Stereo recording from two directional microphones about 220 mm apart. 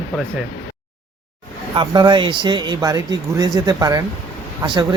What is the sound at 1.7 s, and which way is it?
Speech, 20° right (ahead or behind).